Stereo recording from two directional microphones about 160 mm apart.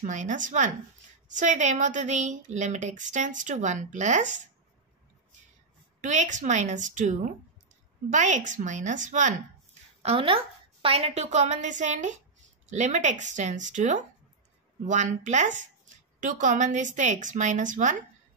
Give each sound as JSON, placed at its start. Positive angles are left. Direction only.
{"t": 0.0, "sound": "a woman's voice", "side_deg": -50}
{"t": 5.9, "sound": "a woman's voice", "side_deg": -50}
{"t": 10.0, "sound": "a woman's voice", "side_deg": -35}